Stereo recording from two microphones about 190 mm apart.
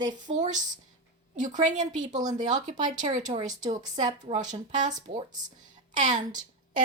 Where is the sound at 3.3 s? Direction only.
20° right (ahead or behind).